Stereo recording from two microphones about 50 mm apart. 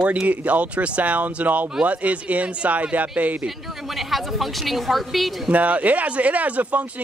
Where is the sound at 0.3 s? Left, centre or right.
Right.